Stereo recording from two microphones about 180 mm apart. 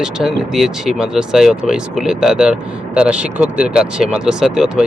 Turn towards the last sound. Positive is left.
turn(degrees=-5)  # may be behind; listen again after turning